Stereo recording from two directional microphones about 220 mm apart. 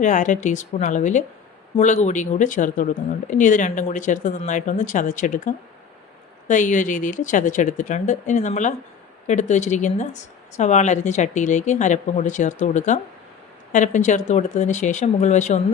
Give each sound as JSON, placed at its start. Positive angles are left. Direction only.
{"t": 0.0, "sound": "speech", "side_deg": 35}